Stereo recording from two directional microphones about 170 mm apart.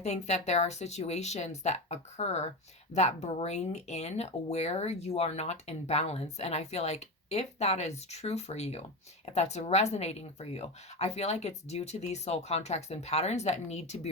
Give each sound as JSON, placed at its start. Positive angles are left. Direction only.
{"t": 0.0, "sound": "speech", "side_deg": 40}